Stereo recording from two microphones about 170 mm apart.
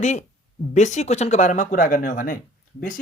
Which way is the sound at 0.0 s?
45° left (ahead or behind).